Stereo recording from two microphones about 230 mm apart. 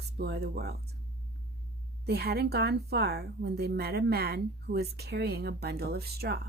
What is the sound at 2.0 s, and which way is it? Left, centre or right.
Speech, right.